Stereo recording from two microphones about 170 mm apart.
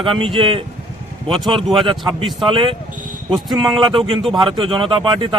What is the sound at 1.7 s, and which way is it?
A man's voice, 30° right (ahead or behind).